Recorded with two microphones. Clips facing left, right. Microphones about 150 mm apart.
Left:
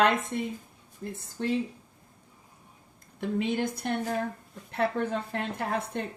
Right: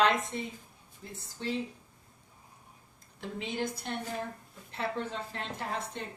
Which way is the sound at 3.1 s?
55° left (ahead or behind).